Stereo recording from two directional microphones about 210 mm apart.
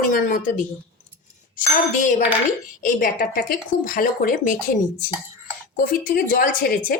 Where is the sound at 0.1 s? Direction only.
40° left (ahead or behind).